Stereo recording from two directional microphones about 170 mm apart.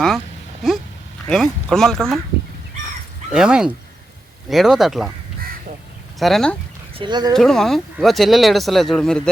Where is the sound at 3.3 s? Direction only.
5° right (ahead or behind).